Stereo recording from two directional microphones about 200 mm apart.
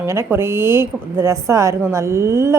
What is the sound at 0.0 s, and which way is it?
A woman's voice, 15° right (ahead or behind).